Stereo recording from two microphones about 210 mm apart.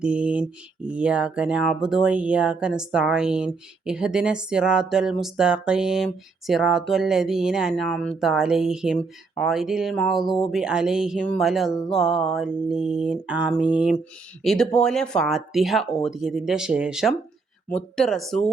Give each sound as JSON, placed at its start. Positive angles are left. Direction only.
{"t": 0.0, "sound": "speech", "side_deg": -5}